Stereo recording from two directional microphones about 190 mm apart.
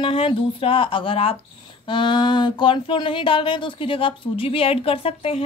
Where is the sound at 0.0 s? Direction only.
30° left (ahead or behind).